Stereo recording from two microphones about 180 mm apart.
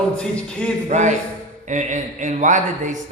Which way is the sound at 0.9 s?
40° right (ahead or behind).